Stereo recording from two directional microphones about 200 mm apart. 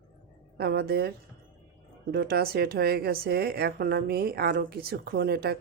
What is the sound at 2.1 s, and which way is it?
A woman's voice, 50° right (ahead or behind).